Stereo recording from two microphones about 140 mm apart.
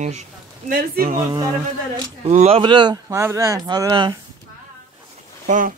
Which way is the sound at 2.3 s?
55° right (ahead or behind).